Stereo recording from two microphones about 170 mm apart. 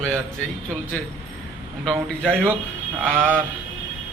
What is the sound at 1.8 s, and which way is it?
A man's voice, 5° left (ahead or behind).